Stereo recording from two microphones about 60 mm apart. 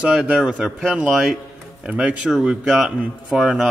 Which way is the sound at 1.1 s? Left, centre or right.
Centre.